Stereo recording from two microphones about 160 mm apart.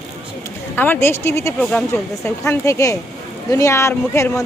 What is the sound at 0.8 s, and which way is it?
Speech, 15° left (ahead or behind).